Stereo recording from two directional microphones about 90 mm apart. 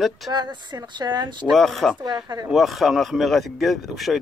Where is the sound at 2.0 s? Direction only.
45° right (ahead or behind).